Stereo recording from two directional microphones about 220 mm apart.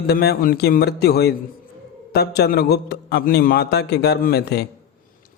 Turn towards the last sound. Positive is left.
turn(degrees=50)  # may be behind; listen again after turning